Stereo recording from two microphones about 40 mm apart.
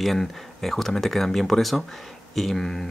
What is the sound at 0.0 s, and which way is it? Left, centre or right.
Speech, centre.